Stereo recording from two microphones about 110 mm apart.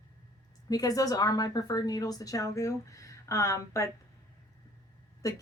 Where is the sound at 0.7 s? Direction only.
35° left (ahead or behind).